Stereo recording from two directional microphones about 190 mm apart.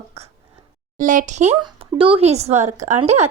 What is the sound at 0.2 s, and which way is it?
Speech, 35° right (ahead or behind).